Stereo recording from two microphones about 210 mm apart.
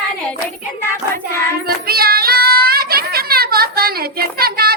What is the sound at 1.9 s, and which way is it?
Child singing, 45° right (ahead or behind).